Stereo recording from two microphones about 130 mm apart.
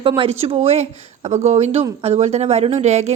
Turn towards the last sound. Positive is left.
turn(degrees=-60)  # may be behind; listen again after turning